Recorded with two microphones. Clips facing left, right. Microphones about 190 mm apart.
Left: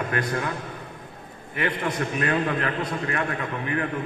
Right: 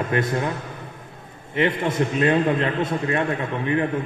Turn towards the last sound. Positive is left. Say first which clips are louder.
# right 5 dB
turn(degrees=-25)  # may be behind; listen again after turning